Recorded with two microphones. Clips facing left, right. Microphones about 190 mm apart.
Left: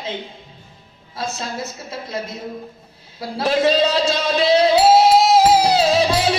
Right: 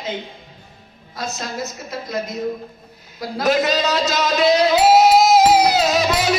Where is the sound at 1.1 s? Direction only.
30° left (ahead or behind).